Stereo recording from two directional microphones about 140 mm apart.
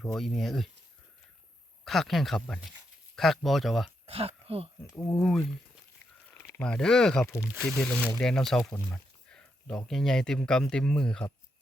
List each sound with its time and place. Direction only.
0.0 s speech: centre (ahead or behind)
1.8 s speech: centre (ahead or behind)
4.0 s speech: 45° right (ahead or behind)
4.9 s speech: 20° left (ahead or behind)
5.1 s speech: 5° left (ahead or behind)
6.3 s a sound: 20° left (ahead or behind)
6.6 s speech: 5° left (ahead or behind)